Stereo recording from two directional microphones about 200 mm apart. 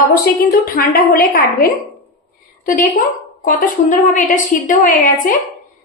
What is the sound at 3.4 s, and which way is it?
A woman's voice, 40° left (ahead or behind).